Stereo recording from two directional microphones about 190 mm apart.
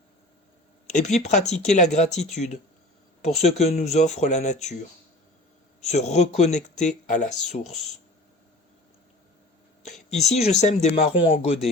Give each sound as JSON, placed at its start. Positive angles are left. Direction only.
{"t": 0.9, "sound": "speech", "side_deg": 35}
{"t": 3.2, "sound": "speech", "side_deg": 35}
{"t": 10.2, "sound": "speech", "side_deg": 35}